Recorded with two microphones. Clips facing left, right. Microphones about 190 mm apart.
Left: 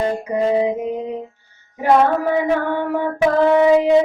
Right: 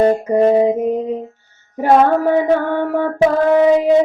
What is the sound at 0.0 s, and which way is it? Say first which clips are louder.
Child singing: right 7 dB; 45° right (ahead or behind).